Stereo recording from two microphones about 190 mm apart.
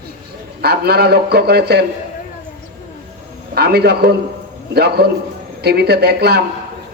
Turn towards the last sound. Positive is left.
turn(degrees=-60)  # may be behind; listen again after turning